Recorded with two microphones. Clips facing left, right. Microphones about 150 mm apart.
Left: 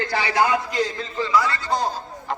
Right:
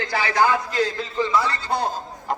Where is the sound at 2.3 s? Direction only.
45° right (ahead or behind).